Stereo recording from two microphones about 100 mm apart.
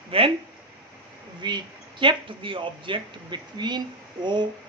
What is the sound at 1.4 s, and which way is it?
A child's voice, 50° right (ahead or behind).